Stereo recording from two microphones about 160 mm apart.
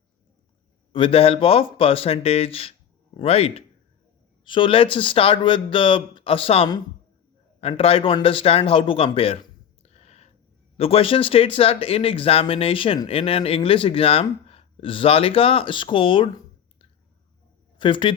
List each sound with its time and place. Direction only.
0.9 s a man's voice: 35° left (ahead or behind)